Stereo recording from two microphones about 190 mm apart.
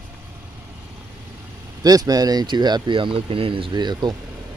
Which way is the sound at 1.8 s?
20° right (ahead or behind).